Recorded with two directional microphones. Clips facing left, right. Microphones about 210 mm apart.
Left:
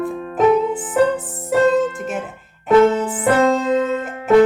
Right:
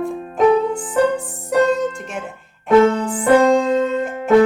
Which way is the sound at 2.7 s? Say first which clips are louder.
Even; 5° left (ahead or behind).